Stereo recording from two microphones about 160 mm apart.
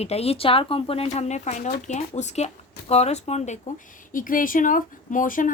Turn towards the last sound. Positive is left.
turn(degrees=55)  # may be behind; listen again after turning